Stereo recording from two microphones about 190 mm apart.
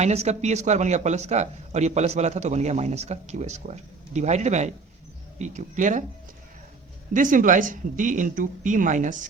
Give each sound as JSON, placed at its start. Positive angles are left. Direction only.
{"t": 0.0, "sound": "speech", "side_deg": -35}
{"t": 7.1, "sound": "speech", "side_deg": -45}